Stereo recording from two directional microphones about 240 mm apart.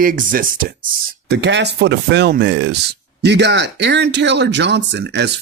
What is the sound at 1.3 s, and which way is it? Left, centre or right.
Speech, right.